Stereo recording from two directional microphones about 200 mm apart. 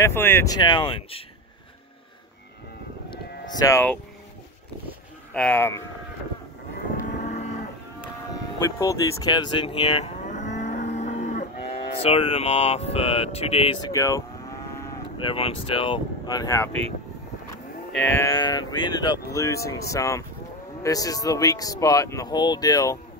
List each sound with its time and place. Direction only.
0.0 s speech: 10° left (ahead or behind)
3.1 s cattle: 20° left (ahead or behind)
5.3 s speech: 5° left (ahead or behind)
7.0 s vehicle: 35° left (ahead or behind)
8.7 s moo: 15° left (ahead or behind); by 11.4 s 35° left (ahead or behind)
12.0 s speech: 30° left (ahead or behind)
13.9 s speech: 15° left (ahead or behind)
15.1 s speech: 25° left (ahead or behind)
17.9 s speech: 10° left (ahead or behind)